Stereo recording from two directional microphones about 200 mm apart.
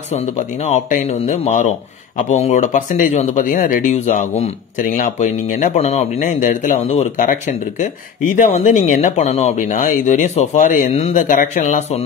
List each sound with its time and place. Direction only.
0.7 s a man's voice: 35° left (ahead or behind)